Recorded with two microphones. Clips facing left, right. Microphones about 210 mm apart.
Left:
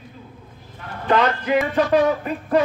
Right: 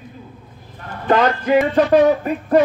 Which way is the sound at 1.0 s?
40° right (ahead or behind).